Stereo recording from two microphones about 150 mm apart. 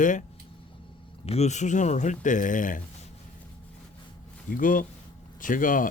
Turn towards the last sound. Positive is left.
turn(degrees=65)  # may be behind; listen again after turning